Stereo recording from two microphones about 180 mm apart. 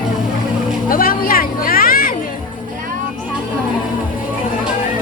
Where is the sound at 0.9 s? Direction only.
55° left (ahead or behind).